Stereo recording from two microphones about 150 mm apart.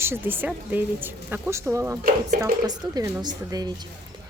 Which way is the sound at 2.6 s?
25° right (ahead or behind).